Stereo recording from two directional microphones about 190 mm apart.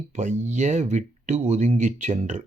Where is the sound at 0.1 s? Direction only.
40° right (ahead or behind).